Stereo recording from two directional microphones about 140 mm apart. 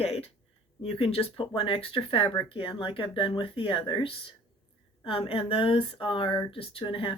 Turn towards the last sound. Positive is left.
turn(degrees=40)  # may be behind; listen again after turning